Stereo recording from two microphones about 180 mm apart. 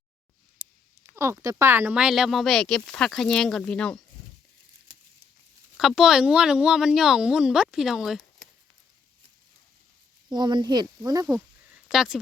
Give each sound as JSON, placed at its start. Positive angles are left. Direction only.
{"t": 1.1, "sound": "speech", "side_deg": -15}
{"t": 4.9, "sound": "crumpling", "side_deg": -25}
{"t": 5.7, "sound": "speech", "side_deg": 0}
{"t": 10.2, "sound": "speech", "side_deg": -25}
{"t": 11.9, "sound": "speech", "side_deg": -5}